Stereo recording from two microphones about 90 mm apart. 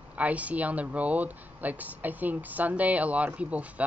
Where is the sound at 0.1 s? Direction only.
15° right (ahead or behind).